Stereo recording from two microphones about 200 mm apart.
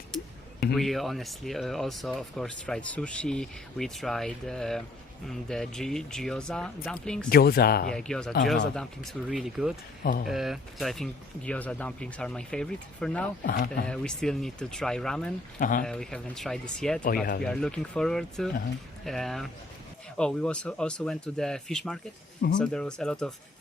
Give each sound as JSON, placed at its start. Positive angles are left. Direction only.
{"t": 0.1, "sound": "a sound", "side_deg": 0}
{"t": 0.7, "sound": "speech", "side_deg": 0}
{"t": 7.3, "sound": "speech", "side_deg": 50}
{"t": 7.9, "sound": "speech", "side_deg": 5}
{"t": 10.0, "sound": "speech", "side_deg": 45}
{"t": 10.2, "sound": "speech", "side_deg": 0}
{"t": 13.4, "sound": "speech", "side_deg": 50}
{"t": 13.8, "sound": "speech", "side_deg": 5}
{"t": 15.5, "sound": "speech", "side_deg": 40}
{"t": 15.8, "sound": "speech", "side_deg": 5}